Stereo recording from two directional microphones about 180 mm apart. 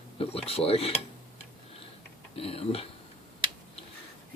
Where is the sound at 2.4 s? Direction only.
35° left (ahead or behind).